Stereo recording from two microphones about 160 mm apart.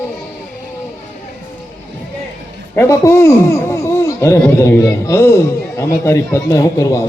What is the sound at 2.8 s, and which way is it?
Speech, 15° left (ahead or behind).